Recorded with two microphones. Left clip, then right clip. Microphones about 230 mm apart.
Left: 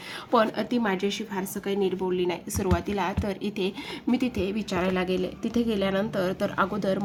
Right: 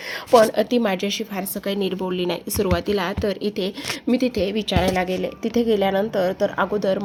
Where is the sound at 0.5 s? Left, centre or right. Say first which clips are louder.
Right 7 dB; centre.